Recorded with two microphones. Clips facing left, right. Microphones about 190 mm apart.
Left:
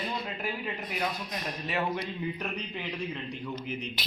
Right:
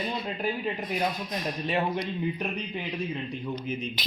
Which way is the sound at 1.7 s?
25° right (ahead or behind).